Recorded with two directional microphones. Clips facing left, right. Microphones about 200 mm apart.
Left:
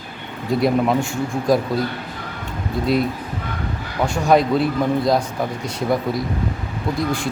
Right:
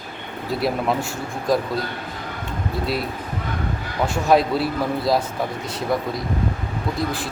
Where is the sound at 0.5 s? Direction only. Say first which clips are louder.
Left 5 dB; centre (ahead or behind).